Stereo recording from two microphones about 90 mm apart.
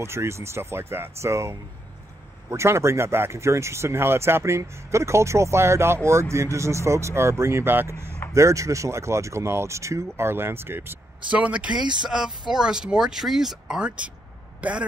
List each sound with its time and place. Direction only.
0.0 s speech: 30° right (ahead or behind)
11.2 s speech: 15° right (ahead or behind)